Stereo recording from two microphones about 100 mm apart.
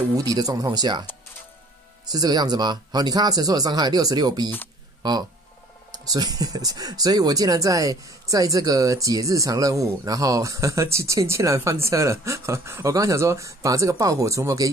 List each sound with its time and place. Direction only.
0.1 s speech: 40° right (ahead or behind)
2.0 s speech: 40° right (ahead or behind)